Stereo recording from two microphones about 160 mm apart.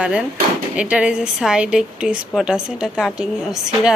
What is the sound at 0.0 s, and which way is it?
A woman's voice, 5° right (ahead or behind).